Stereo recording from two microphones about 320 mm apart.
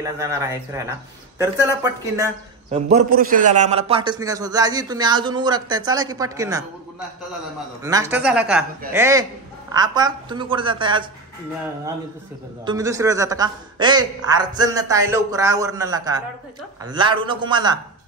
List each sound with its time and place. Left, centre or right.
0.0 s a man's voice: centre
2.9 s a man's voice: right
7.8 s a man's voice: centre
12.6 s a man's voice: centre